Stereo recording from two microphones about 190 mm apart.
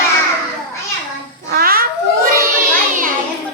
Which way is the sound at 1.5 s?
50° right (ahead or behind).